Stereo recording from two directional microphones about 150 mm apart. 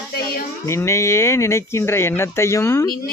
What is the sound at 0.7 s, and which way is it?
Speech, 20° left (ahead or behind).